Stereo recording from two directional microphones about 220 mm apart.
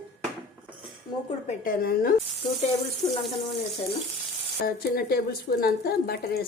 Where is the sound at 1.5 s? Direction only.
40° left (ahead or behind).